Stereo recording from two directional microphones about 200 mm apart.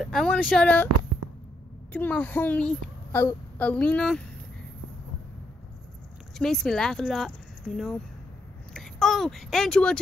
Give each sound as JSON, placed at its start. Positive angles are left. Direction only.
{"t": 0.0, "sound": "speech", "side_deg": 0}
{"t": 1.9, "sound": "a woman's voice", "side_deg": 10}
{"t": 6.3, "sound": "speech", "side_deg": 0}